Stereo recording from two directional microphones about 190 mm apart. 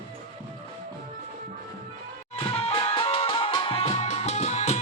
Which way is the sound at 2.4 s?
30° left (ahead or behind).